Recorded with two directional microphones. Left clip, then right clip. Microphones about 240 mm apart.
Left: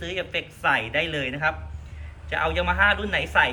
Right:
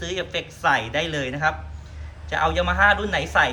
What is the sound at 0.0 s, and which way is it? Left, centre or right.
A woman's voice, centre.